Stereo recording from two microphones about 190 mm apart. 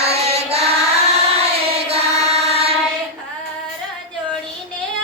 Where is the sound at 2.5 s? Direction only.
30° right (ahead or behind).